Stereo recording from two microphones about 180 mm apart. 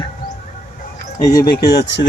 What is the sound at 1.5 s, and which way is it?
Speech, 70° left (ahead or behind).